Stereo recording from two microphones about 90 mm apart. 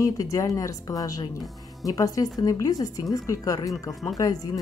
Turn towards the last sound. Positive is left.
turn(degrees=40)  # may be behind; listen again after turning